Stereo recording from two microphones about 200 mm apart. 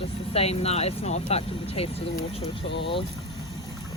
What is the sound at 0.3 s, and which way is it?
Speech, 30° left (ahead or behind).